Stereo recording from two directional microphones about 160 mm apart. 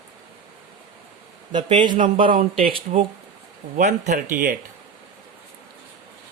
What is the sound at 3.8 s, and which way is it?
Speech, 50° right (ahead or behind).